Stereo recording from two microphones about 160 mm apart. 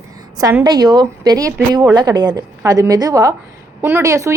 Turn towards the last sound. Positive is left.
turn(degrees=-20)  # may be behind; listen again after turning